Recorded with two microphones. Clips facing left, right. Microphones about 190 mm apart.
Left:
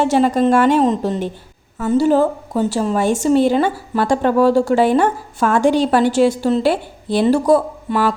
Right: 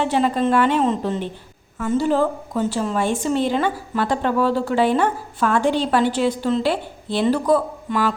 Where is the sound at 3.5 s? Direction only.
40° left (ahead or behind).